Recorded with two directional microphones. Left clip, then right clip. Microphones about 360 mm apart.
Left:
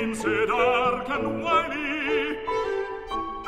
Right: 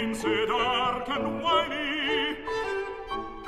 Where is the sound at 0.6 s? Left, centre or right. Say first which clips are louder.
Left 4 dB; left.